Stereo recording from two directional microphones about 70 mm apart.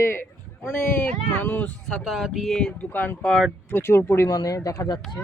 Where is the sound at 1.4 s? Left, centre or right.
Left.